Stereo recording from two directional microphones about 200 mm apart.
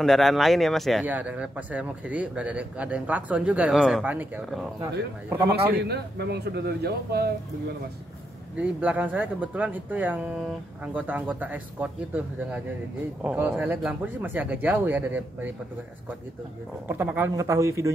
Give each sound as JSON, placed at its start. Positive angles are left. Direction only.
{"t": 0.0, "sound": "speech", "side_deg": 0}
{"t": 5.8, "sound": "speech", "side_deg": -55}
{"t": 8.5, "sound": "speech", "side_deg": -5}
{"t": 16.8, "sound": "speech", "side_deg": -10}